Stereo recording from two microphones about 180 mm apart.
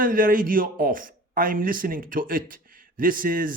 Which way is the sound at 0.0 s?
50° right (ahead or behind).